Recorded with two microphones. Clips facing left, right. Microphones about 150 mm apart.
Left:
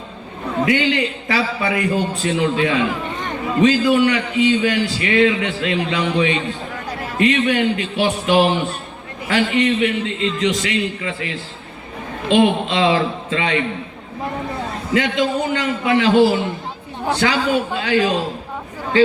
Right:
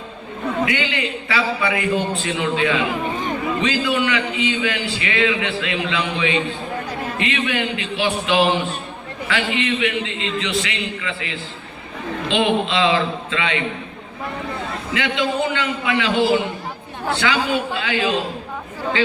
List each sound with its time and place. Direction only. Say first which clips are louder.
0.6 s a man's voice: left 7 dB; 40° left (ahead or behind)
14.9 s a man's voice: left 3 dB; 45° left (ahead or behind)